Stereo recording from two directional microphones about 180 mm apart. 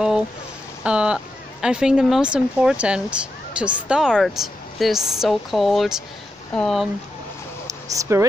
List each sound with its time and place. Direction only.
0.8 s speech: 5° right (ahead or behind)
7.9 s speech: 15° right (ahead or behind)